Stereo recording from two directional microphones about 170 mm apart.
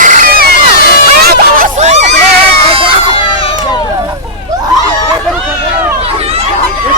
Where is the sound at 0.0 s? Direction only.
50° right (ahead or behind).